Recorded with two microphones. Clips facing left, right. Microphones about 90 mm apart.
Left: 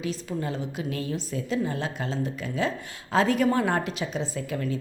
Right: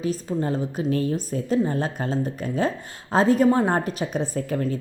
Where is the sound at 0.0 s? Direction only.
40° right (ahead or behind).